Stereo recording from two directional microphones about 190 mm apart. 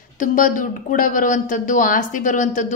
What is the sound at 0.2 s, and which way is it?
Speech, 45° left (ahead or behind).